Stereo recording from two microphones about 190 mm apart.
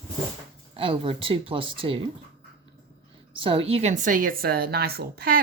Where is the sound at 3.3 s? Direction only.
30° right (ahead or behind).